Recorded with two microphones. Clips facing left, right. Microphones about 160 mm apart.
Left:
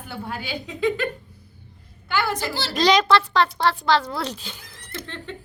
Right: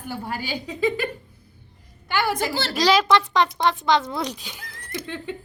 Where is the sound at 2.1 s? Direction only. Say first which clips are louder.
Right 1 dB; 15° right (ahead or behind).